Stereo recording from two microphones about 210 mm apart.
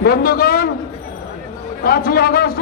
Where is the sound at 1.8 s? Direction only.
45° left (ahead or behind).